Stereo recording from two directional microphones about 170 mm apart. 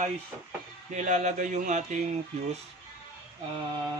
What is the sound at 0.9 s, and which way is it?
Speech, 45° right (ahead or behind).